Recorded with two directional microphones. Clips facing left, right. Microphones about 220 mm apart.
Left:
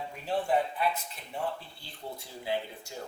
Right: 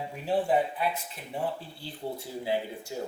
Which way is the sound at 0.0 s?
10° right (ahead or behind).